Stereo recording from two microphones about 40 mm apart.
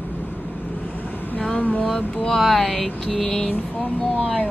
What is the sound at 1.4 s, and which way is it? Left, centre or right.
Speech, left.